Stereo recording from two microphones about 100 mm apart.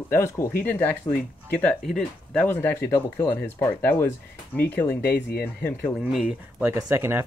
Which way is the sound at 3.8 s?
20° left (ahead or behind).